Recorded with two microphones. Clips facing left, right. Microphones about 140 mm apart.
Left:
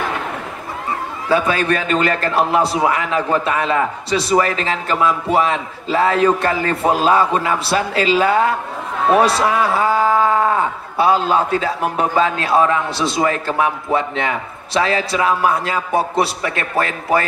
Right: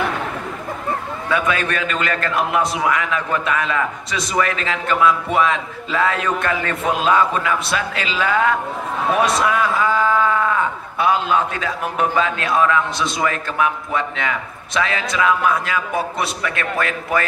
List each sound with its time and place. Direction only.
1.3 s a man's voice: 30° left (ahead or behind)